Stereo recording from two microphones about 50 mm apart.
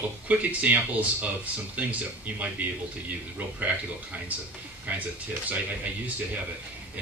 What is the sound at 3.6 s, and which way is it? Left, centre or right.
Speech, right.